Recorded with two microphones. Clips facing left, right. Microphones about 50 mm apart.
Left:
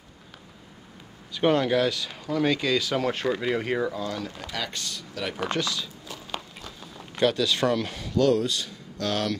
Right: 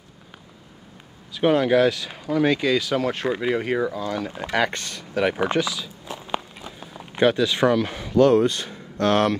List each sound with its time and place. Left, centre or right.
1.3 s speech: centre
4.5 s speech: right
5.4 s speech: centre
6.0 s walk: right